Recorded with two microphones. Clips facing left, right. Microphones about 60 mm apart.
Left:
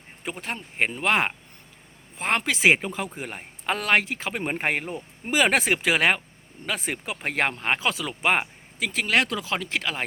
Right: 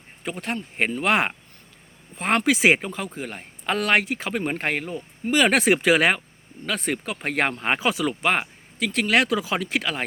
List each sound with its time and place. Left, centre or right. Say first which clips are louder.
0.3 s a man's voice: right 3 dB; centre
4.9 s speech: right 3 dB; left
5.5 s a man's voice: right 4 dB; centre
8.2 s a man's voice: even; centre